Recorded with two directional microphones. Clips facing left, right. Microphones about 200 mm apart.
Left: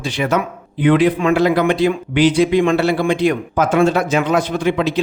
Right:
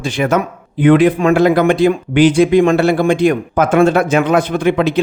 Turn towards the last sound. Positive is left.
turn(degrees=-55)  # may be behind; listen again after turning